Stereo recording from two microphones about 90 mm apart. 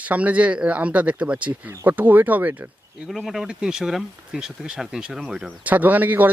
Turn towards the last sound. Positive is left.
turn(degrees=-20)  # may be behind; listen again after turning